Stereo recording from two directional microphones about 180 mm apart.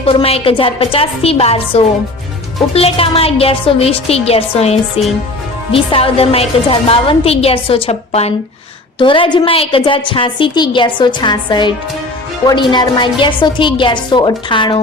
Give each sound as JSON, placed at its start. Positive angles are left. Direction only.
{"t": 0.0, "sound": "a woman's voice", "side_deg": 30}